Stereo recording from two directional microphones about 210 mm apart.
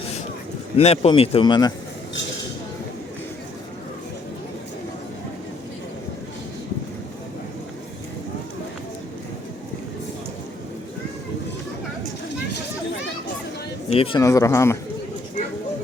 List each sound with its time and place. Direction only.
0.8 s speech: 30° left (ahead or behind)
13.9 s speech: 25° left (ahead or behind)
14.2 s speech: 15° left (ahead or behind)